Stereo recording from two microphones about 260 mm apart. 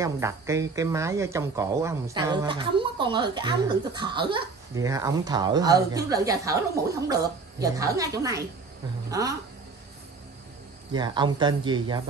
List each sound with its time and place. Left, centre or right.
0.0 s speech: centre
10.9 s speech: centre